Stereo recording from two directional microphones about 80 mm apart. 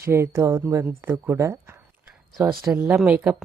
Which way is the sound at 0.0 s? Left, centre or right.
Right.